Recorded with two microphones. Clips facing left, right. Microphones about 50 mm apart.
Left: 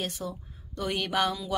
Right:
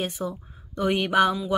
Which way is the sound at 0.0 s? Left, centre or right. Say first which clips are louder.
Right 5 dB; centre.